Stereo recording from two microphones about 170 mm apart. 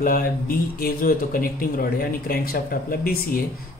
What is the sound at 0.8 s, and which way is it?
Speech, 55° left (ahead or behind).